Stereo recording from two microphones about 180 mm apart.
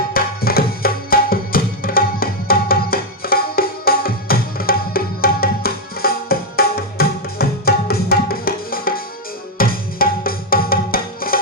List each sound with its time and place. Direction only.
0.1 s tabla: 55° left (ahead or behind)
9.6 s music: 55° left (ahead or behind)